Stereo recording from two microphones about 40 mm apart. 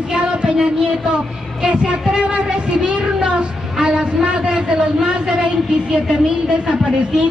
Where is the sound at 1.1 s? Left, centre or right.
Right.